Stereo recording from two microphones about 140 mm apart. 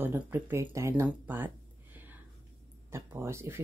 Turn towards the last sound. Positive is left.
turn(degrees=-15)  # may be behind; listen again after turning